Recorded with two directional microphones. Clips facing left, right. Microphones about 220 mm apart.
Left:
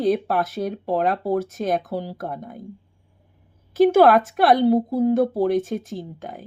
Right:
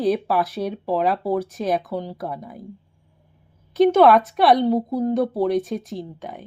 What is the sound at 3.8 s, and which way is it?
Speech, centre (ahead or behind).